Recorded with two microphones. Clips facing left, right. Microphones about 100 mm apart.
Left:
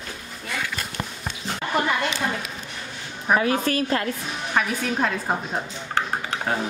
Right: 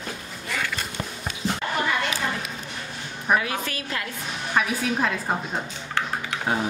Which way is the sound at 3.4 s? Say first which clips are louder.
Left 7 dB; 35° left (ahead or behind).